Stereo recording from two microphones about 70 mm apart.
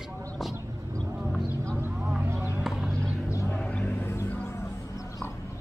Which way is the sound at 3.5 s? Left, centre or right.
Centre.